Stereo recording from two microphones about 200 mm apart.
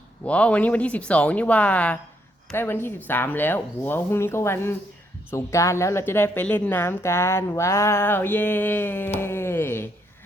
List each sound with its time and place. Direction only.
0.3 s a woman's voice: 5° left (ahead or behind)